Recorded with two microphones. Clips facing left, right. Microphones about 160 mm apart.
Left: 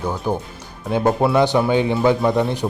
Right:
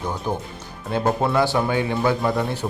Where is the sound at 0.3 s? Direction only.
10° left (ahead or behind).